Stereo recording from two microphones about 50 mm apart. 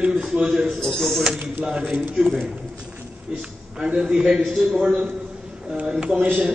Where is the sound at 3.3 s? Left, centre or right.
Centre.